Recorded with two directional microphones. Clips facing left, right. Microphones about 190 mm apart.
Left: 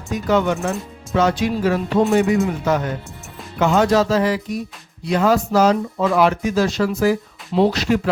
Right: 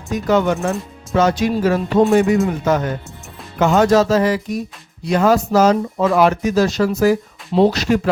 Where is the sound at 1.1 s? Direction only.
45° right (ahead or behind).